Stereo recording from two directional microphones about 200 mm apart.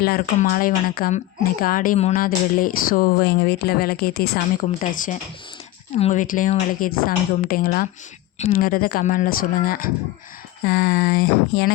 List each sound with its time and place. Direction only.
0.0 s speech: 45° left (ahead or behind)